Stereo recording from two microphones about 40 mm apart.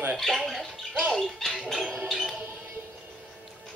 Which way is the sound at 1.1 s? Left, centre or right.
Centre.